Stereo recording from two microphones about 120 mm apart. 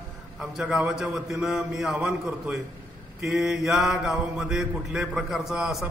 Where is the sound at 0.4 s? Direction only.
5° right (ahead or behind).